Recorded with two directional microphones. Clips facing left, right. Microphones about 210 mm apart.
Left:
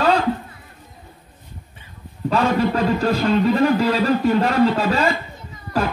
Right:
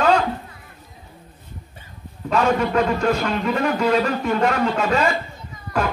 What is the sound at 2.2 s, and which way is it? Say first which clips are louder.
A man's voice: left 1 dB; 30° left (ahead or behind).